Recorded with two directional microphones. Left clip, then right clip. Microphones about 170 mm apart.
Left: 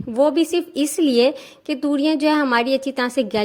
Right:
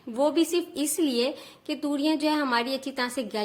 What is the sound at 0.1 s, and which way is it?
A woman's voice, 35° left (ahead or behind).